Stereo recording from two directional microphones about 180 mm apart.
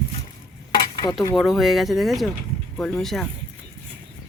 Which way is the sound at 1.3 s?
Centre (ahead or behind).